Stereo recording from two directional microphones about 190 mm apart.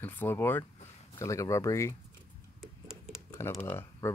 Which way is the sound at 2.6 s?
Centre (ahead or behind).